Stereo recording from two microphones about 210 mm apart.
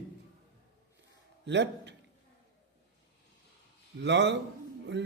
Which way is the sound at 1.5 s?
55° right (ahead or behind).